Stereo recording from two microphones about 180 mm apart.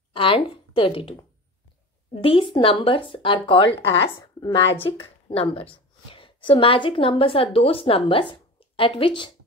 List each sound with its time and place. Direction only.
0.1 s a woman's voice: 30° left (ahead or behind)
2.2 s a woman's voice: 30° left (ahead or behind)